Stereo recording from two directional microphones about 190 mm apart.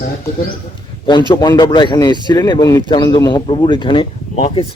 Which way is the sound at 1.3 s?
25° left (ahead or behind).